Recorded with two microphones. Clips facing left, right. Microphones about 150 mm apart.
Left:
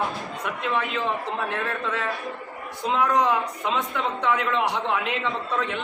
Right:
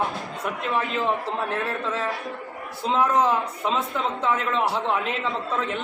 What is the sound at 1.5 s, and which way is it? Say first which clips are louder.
A man's voice: right 1 dB; 35° right (ahead or behind).